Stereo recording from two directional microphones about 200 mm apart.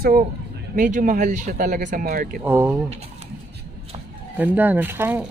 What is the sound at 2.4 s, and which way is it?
Speech, 10° right (ahead or behind).